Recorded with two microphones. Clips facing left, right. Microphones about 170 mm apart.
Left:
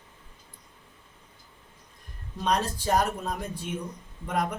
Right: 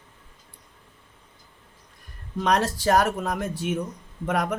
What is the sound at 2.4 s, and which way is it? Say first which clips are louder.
Speech: right 4 dB; 90° right.